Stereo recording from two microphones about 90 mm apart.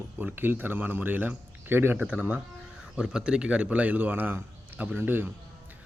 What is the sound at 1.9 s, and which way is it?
Speech, 15° right (ahead or behind).